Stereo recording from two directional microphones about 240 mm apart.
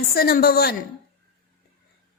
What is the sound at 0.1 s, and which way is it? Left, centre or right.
Speech, left.